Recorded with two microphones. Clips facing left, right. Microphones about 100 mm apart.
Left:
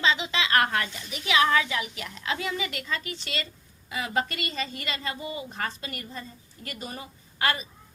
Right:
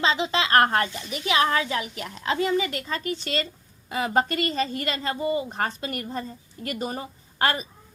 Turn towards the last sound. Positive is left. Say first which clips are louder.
# right 3 dB
turn(degrees=-45)  # may be behind; listen again after turning